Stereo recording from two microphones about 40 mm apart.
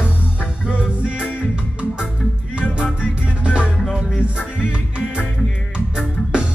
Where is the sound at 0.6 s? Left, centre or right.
Right.